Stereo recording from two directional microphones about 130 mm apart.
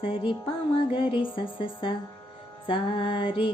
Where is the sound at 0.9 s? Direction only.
40° left (ahead or behind).